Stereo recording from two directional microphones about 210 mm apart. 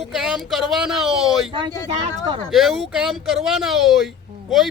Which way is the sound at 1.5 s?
20° right (ahead or behind).